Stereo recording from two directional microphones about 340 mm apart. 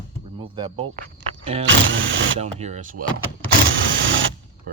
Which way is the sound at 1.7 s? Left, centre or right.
Right.